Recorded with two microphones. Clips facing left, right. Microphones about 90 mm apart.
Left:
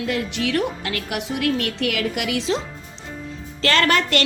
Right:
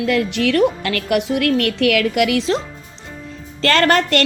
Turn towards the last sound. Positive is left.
turn(degrees=-45)  # may be behind; listen again after turning